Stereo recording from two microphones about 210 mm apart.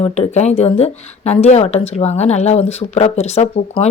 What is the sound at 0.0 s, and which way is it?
Speech, 30° left (ahead or behind).